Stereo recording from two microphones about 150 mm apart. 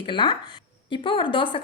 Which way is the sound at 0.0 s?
30° left (ahead or behind).